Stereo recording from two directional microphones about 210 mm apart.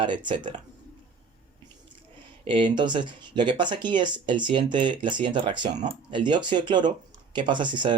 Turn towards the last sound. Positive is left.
turn(degrees=-20)  # may be behind; listen again after turning